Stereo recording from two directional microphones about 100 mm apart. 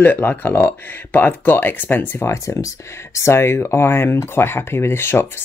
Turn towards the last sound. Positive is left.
turn(degrees=25)  # may be behind; listen again after turning